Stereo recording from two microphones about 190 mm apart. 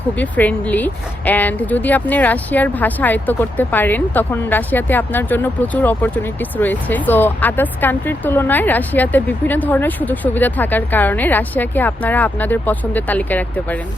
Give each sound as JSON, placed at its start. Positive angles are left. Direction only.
{"t": 0.2, "sound": "speech", "side_deg": 10}